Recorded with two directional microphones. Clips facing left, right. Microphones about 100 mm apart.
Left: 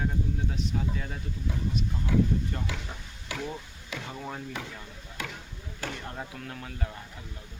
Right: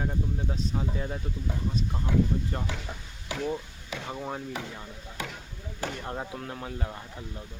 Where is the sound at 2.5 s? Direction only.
35° right (ahead or behind).